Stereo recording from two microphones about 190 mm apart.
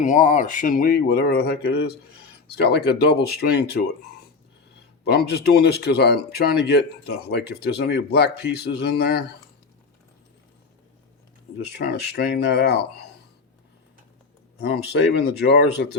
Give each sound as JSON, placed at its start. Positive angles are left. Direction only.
{"t": 0.0, "sound": "speech", "side_deg": 40}
{"t": 5.0, "sound": "speech", "side_deg": 55}
{"t": 11.6, "sound": "speech", "side_deg": 60}
{"t": 14.6, "sound": "speech", "side_deg": 60}